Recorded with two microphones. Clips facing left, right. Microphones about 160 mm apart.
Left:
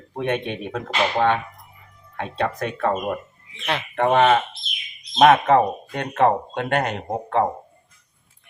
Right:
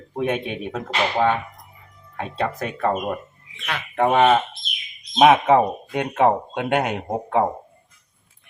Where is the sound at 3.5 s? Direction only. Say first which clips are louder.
Left 4 dB; 30° left (ahead or behind).